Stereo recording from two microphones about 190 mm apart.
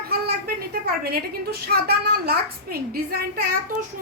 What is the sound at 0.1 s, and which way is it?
A woman's voice, 55° right (ahead or behind).